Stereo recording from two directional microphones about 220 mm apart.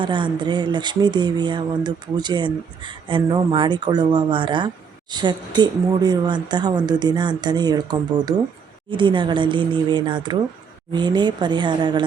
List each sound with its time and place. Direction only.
0.0 s speech: 20° right (ahead or behind)